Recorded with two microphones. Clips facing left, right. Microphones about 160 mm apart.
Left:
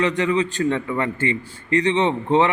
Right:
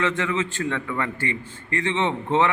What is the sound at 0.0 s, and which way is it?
A man's voice, 15° left (ahead or behind).